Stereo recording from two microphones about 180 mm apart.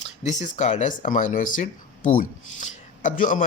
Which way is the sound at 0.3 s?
40° left (ahead or behind).